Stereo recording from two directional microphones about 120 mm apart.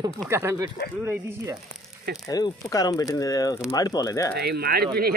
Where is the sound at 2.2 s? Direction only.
30° left (ahead or behind).